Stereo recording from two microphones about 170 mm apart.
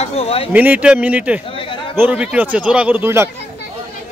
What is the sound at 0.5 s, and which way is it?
Speech, 10° right (ahead or behind).